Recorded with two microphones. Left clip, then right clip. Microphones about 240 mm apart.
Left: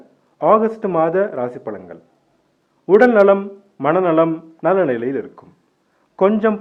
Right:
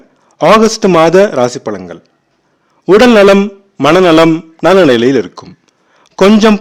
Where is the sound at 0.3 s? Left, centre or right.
Right.